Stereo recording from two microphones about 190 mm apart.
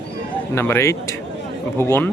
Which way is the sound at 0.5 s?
15° left (ahead or behind).